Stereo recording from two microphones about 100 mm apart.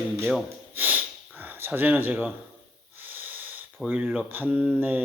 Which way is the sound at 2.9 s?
20° right (ahead or behind).